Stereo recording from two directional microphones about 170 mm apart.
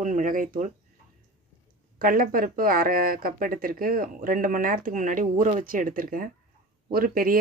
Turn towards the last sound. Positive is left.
turn(degrees=-60)  # may be behind; listen again after turning